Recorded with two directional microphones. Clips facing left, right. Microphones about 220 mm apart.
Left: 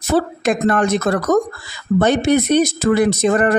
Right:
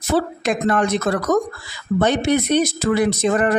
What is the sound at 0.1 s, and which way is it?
Speech, 50° left (ahead or behind).